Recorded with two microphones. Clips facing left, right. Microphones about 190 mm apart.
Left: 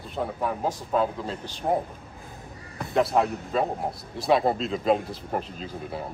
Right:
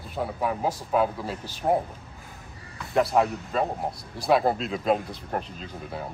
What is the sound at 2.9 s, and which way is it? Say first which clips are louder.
A man's voice: even; centre (ahead or behind).